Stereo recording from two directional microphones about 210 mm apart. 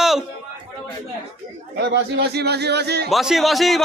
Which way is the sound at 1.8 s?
50° right (ahead or behind).